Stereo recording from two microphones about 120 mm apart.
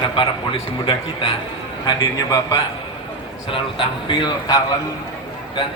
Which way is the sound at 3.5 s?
45° left (ahead or behind).